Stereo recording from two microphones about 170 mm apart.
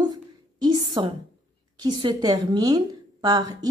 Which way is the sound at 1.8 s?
25° right (ahead or behind).